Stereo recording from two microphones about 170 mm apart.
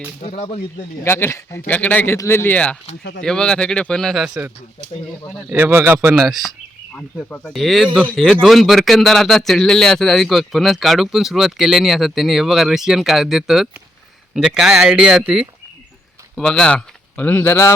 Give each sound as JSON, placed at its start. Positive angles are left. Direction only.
{"t": 0.2, "sound": "speech", "side_deg": 40}
{"t": 1.0, "sound": "speech", "side_deg": 15}
{"t": 3.0, "sound": "speech", "side_deg": 80}
{"t": 3.2, "sound": "a man's voice", "side_deg": 5}
{"t": 6.2, "sound": "a man's voice", "side_deg": 0}